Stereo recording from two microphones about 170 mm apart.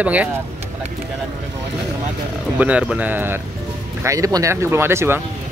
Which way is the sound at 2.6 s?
10° right (ahead or behind).